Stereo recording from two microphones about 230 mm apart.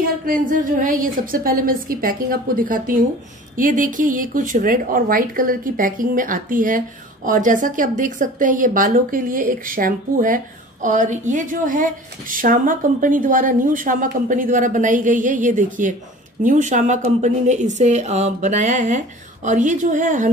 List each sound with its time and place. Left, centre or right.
0.2 s speech: right